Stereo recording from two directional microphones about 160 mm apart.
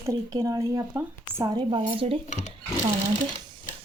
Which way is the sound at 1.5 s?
35° right (ahead or behind).